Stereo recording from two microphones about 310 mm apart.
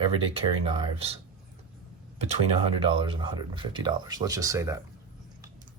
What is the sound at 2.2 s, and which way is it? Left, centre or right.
Speech, centre.